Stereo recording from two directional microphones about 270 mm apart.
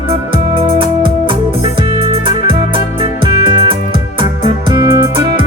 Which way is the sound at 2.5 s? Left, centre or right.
Centre.